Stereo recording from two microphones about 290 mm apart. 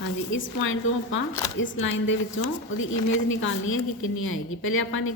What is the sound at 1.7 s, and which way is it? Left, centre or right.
A woman's voice, left.